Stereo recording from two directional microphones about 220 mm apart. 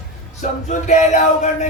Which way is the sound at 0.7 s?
35° left (ahead or behind).